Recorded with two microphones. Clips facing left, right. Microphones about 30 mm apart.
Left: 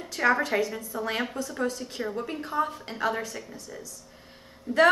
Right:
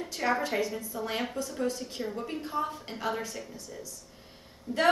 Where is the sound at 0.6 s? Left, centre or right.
Left.